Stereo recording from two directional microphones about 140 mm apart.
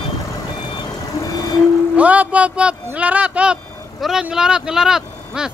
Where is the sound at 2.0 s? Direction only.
10° right (ahead or behind).